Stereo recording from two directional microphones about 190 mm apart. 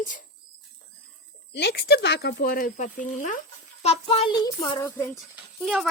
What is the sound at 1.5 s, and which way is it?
Speech, 60° left (ahead or behind).